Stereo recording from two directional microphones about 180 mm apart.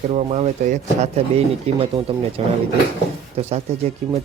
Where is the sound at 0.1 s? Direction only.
35° right (ahead or behind).